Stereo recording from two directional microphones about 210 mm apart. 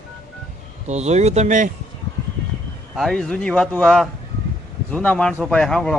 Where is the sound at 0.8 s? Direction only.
30° right (ahead or behind).